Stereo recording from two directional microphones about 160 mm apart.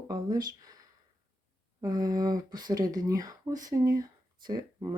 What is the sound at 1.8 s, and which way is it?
Speech, 25° right (ahead or behind).